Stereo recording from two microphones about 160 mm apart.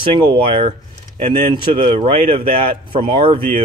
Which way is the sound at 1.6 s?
35° right (ahead or behind).